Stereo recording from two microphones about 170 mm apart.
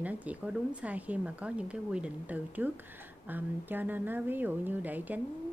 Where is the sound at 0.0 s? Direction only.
10° right (ahead or behind).